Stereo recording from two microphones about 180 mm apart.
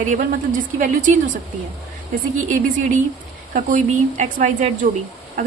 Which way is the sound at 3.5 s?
45° right (ahead or behind).